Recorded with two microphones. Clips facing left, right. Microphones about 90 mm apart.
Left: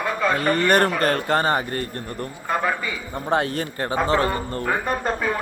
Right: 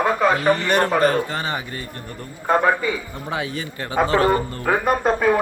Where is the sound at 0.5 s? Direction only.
50° left (ahead or behind).